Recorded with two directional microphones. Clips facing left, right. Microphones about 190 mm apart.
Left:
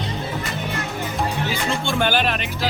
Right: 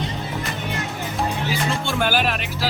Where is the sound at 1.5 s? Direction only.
5° right (ahead or behind).